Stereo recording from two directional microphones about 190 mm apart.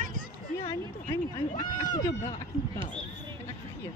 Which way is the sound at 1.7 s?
45° left (ahead or behind).